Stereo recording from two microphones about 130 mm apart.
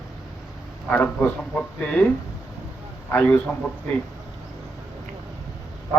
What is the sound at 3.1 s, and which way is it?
Speech, 15° left (ahead or behind).